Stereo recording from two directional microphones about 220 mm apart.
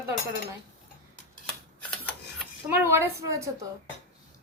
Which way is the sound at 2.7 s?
10° right (ahead or behind).